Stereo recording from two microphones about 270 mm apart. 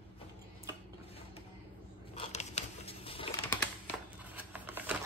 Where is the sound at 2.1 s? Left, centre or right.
Left.